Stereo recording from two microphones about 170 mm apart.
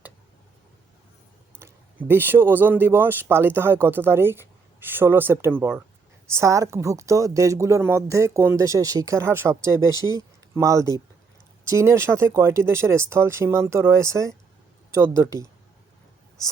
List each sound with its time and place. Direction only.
1.5 s speech: 15° right (ahead or behind)